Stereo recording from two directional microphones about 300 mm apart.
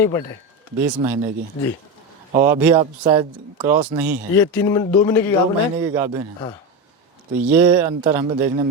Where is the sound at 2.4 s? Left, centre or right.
Centre.